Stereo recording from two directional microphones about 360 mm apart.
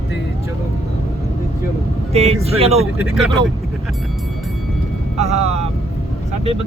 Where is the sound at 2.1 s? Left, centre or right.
Centre.